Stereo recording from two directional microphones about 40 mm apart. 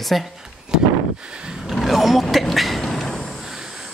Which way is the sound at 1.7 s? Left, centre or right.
Centre.